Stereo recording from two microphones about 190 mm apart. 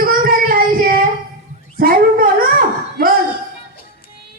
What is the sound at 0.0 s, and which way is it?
Child singing, 50° right (ahead or behind).